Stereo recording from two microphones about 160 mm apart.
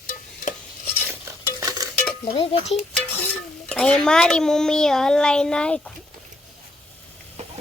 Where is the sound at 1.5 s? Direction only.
20° right (ahead or behind).